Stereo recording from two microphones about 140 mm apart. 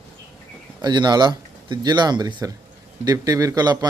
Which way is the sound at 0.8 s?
30° right (ahead or behind).